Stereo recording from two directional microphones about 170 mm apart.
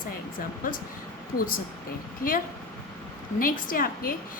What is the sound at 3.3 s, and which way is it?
Speech, 55° left (ahead or behind).